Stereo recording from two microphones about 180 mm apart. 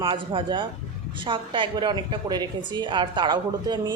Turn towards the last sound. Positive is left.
turn(degrees=-25)  # may be behind; listen again after turning